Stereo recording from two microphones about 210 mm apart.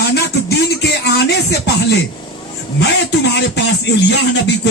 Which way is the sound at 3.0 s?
55° left (ahead or behind).